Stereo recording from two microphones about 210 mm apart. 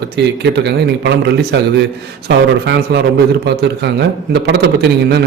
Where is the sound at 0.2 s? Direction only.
55° right (ahead or behind).